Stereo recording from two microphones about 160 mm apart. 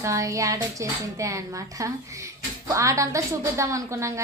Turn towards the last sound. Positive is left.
turn(degrees=-20)  # may be behind; listen again after turning